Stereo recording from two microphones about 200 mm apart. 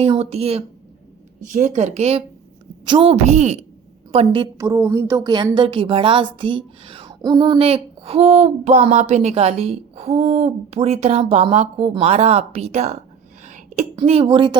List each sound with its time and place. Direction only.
0.0 s a woman's voice: 30° right (ahead or behind)
13.4 s a sound: 35° right (ahead or behind)
13.9 s a woman's voice: 30° right (ahead or behind)